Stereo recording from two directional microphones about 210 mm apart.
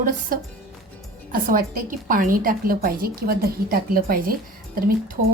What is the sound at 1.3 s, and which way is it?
A woman's voice, 45° right (ahead or behind).